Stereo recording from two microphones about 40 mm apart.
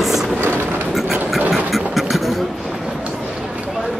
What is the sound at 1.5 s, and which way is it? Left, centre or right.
Engine, centre.